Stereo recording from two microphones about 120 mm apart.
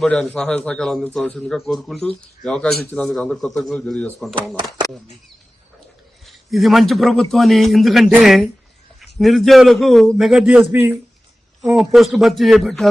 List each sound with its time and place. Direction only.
0.0 s a man's voice: 5° left (ahead or behind)
6.2 s a man's voice: centre (ahead or behind)
10.6 s a man's voice: 20° right (ahead or behind)
11.6 s a man's voice: 5° right (ahead or behind)